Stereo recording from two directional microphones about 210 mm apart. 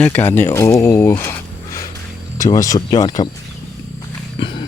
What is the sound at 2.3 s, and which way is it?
Speech, 15° left (ahead or behind).